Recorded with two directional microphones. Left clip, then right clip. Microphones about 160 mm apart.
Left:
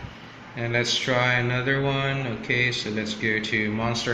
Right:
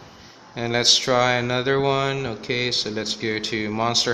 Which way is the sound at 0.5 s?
80° right.